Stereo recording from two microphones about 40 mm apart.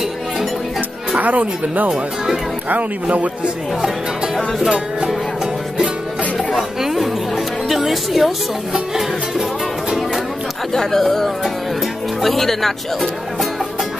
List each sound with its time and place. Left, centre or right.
1.1 s speech: right
6.3 s music: centre
10.7 s speech: centre